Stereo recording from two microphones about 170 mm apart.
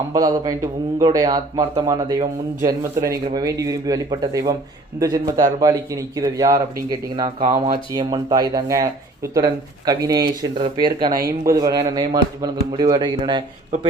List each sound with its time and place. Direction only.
0.1 s speech: 20° right (ahead or behind)